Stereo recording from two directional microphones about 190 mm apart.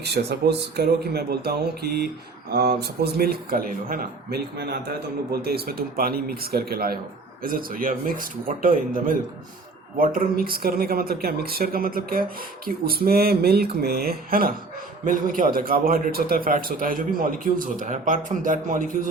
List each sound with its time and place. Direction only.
0.0 s speech: 60° right (ahead or behind); by 19.0 s 45° right (ahead or behind)